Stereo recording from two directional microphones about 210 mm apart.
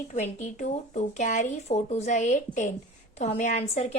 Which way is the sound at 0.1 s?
35° left (ahead or behind).